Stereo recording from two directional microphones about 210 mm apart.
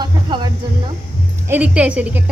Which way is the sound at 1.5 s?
5° right (ahead or behind).